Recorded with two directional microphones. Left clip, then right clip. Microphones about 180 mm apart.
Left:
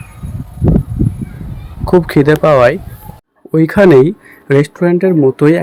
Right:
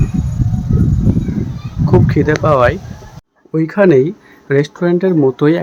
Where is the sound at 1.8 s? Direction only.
30° left (ahead or behind).